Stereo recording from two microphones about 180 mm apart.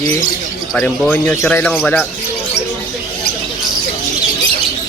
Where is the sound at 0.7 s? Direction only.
5° left (ahead or behind).